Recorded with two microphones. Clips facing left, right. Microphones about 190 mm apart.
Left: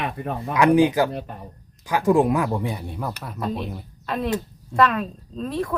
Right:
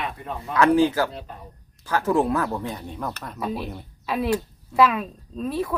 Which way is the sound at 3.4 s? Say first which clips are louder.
Left 1 dB; 5° right (ahead or behind).